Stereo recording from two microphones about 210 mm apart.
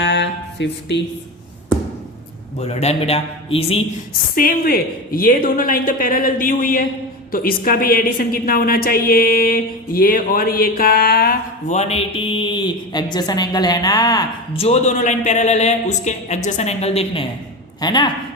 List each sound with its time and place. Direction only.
0.0 s a sound: 55° left (ahead or behind)
2.6 s speech: 30° left (ahead or behind)
4.4 s a woman's voice: 45° left (ahead or behind)
11.7 s a woman's voice: 30° left (ahead or behind)